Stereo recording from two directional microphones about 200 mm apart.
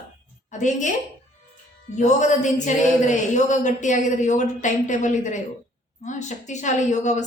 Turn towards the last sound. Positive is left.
turn(degrees=35)  # may be behind; listen again after turning